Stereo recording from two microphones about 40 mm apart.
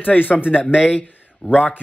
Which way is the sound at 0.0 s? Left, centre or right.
Left.